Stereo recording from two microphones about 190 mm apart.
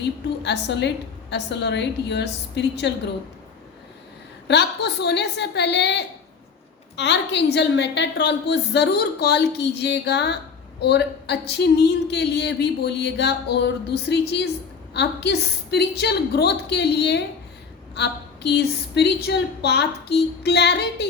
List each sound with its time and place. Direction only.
0.0 s a woman's voice: 65° left (ahead or behind)
4.4 s a woman's voice: 65° left (ahead or behind)